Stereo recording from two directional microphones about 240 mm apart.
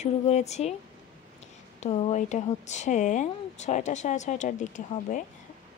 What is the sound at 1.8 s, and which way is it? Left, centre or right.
A woman's voice, left.